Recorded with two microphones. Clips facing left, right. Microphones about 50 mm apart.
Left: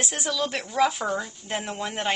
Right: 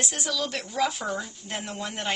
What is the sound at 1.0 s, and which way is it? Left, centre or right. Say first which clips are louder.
A woman's voice: left 3 dB; centre.